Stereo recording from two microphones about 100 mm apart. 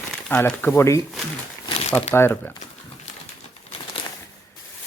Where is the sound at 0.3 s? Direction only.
10° left (ahead or behind).